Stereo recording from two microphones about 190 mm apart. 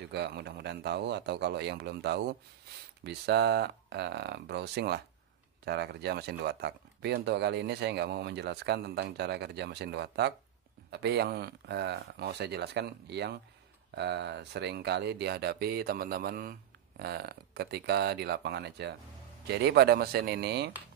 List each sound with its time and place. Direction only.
0.1 s speech: 60° right (ahead or behind)